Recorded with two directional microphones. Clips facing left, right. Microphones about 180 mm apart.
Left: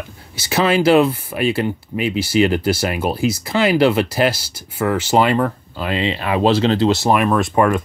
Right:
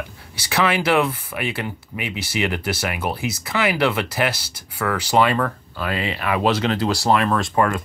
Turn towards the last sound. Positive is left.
turn(degrees=20)  # may be behind; listen again after turning